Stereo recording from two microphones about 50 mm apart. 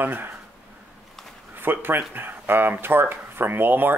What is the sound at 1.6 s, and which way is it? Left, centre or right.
Speech, right.